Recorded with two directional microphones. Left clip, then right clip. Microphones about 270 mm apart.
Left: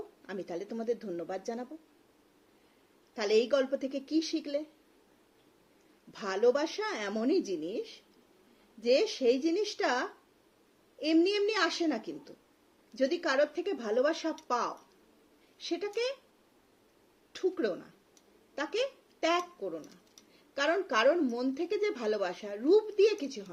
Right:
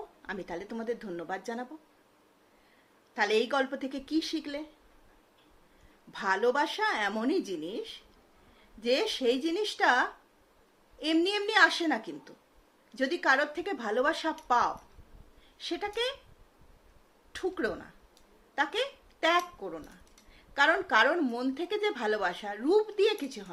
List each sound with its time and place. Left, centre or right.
0.3 s speech: centre
3.2 s speech: centre
6.1 s speech: centre
13.0 s speech: centre
17.3 s speech: centre